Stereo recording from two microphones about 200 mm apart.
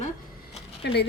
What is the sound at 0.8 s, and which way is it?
Speech, 55° left (ahead or behind).